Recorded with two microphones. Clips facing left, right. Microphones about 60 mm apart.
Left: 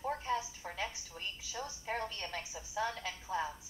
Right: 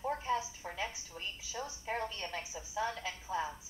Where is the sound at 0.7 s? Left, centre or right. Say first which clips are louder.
Right 1 dB; centre.